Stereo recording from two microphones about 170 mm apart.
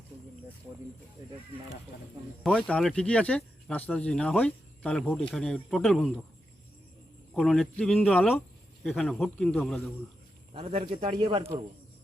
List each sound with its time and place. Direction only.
1.2 s speech: 25° right (ahead or behind)
2.4 s speech: 10° left (ahead or behind)
7.3 s speech: centre (ahead or behind)
10.5 s speech: 35° right (ahead or behind)